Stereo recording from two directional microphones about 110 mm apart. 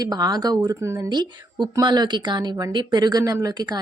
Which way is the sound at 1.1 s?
40° right (ahead or behind).